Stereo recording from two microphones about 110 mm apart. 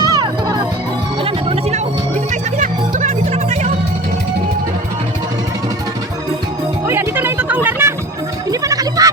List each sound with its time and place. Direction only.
0.0 s music: 35° right (ahead or behind)
1.2 s music: 60° right (ahead or behind)
3.0 s music: 90° right
6.8 s music: 20° right (ahead or behind)
8.4 s a sound: 30° right (ahead or behind)